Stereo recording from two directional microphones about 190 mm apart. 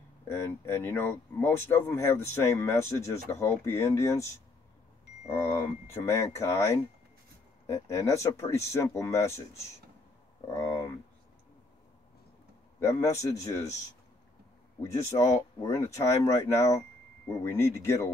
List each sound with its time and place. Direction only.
0.3 s speech: 15° left (ahead or behind)
5.4 s speech: 15° left (ahead or behind)
10.6 s a sound: 15° left (ahead or behind)
12.8 s speech: 15° left (ahead or behind)
15.1 s speech: 15° left (ahead or behind)